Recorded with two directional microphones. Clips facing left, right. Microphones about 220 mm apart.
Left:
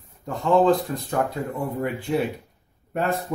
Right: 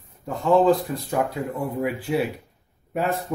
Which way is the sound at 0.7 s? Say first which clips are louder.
Right 1 dB; 10° right (ahead or behind).